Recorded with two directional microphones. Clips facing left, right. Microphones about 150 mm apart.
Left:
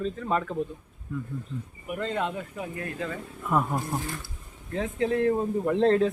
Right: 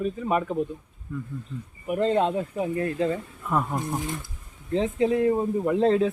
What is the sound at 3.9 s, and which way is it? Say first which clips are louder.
Speech: right 2 dB; 20° right (ahead or behind).